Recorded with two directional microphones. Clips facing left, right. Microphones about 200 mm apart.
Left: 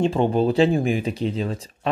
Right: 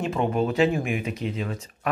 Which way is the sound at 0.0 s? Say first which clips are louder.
Left 5 dB; 30° left (ahead or behind).